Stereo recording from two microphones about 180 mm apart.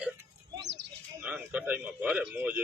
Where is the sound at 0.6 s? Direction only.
75° right (ahead or behind).